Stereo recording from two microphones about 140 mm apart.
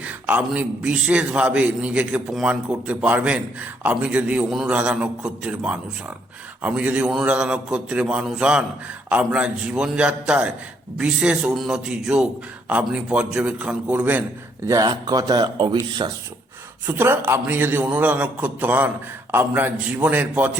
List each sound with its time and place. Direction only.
0.0 s a man's voice: 10° right (ahead or behind)
14.7 s speech: 30° right (ahead or behind)
16.8 s a man's voice: 15° right (ahead or behind)